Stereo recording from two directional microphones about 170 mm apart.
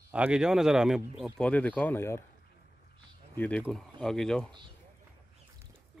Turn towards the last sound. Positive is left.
turn(degrees=5)  # may be behind; listen again after turning